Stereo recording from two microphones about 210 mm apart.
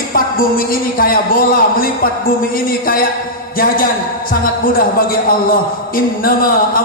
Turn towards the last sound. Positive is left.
turn(degrees=45)  # may be behind; listen again after turning